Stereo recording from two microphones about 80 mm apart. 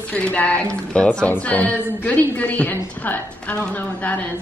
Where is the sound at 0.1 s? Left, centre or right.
Centre.